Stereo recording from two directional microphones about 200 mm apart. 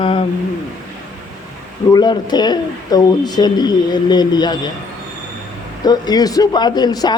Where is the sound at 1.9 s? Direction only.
20° left (ahead or behind).